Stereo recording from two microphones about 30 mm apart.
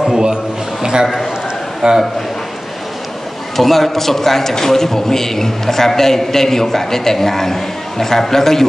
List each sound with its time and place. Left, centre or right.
0.1 s a sound: right
1.8 s a man's voice: right
3.5 s a man's voice: centre